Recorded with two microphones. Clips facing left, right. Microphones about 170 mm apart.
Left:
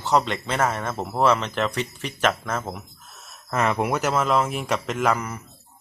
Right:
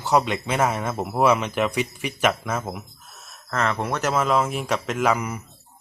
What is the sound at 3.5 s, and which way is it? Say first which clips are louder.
Speech: left 2 dB; 15° left (ahead or behind).